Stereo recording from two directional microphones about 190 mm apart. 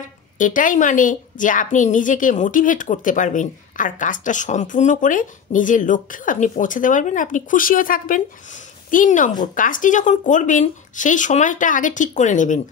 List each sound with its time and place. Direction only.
0.4 s a woman's voice: 45° left (ahead or behind)